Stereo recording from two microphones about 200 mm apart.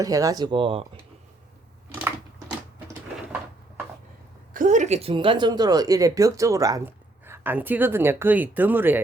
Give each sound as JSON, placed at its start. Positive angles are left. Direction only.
{"t": 0.0, "sound": "speech", "side_deg": -15}
{"t": 4.5, "sound": "speech", "side_deg": -40}